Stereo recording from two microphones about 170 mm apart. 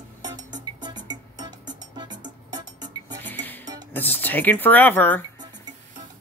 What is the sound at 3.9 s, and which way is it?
Speech, 10° left (ahead or behind).